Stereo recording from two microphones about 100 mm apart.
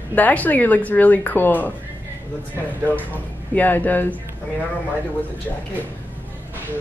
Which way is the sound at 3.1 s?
15° left (ahead or behind).